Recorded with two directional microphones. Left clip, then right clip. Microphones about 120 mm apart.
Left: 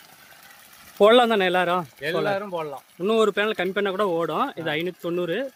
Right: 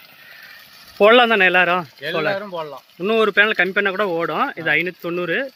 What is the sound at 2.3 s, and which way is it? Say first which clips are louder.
Speech: right 2 dB; 30° left (ahead or behind).